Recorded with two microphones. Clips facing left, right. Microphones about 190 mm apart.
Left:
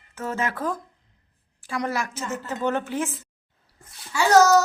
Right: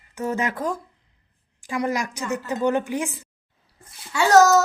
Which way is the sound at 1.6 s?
15° right (ahead or behind).